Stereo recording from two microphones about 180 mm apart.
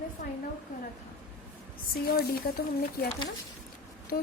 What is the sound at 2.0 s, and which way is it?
Speech, 55° left (ahead or behind).